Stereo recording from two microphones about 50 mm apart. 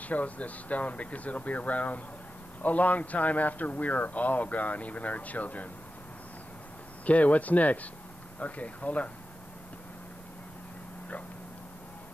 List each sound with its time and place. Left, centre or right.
0.0 s speech: left
7.1 s speech: left